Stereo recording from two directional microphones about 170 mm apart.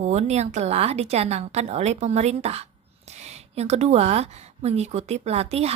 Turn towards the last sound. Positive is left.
turn(degrees=-40)  # may be behind; listen again after turning